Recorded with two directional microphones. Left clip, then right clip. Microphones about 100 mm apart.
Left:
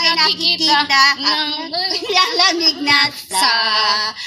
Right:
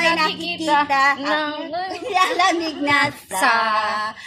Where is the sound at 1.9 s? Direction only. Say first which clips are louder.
Left 3 dB; 45° right (ahead or behind).